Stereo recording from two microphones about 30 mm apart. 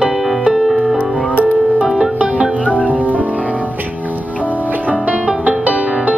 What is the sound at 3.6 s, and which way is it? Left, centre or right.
Music, right.